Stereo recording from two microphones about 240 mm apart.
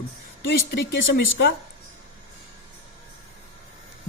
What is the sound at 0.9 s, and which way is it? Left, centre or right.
Speech, left.